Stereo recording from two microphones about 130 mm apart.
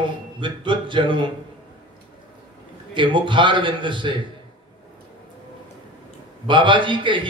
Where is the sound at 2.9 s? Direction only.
40° right (ahead or behind).